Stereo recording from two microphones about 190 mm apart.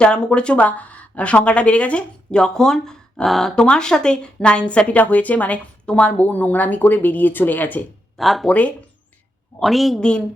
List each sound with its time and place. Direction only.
0.0 s a woman's voice: 5° left (ahead or behind)